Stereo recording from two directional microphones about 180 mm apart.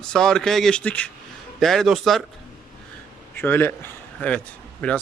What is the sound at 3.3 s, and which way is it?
A man's voice, 10° left (ahead or behind).